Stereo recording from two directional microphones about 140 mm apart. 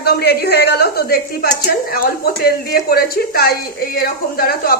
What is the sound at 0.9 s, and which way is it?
Speech, 90° left.